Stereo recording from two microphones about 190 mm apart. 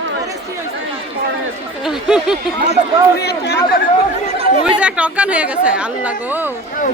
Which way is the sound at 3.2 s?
60° left (ahead or behind).